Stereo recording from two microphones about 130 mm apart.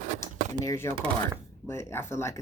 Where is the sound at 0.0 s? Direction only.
65° right (ahead or behind).